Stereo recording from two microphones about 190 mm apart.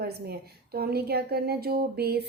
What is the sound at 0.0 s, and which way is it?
A woman's voice, 55° right (ahead or behind).